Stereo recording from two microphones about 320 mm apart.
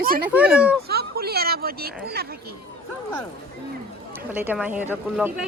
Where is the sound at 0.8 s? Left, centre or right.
Right.